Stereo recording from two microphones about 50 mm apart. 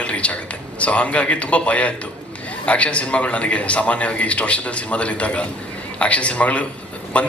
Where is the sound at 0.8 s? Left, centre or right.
Left.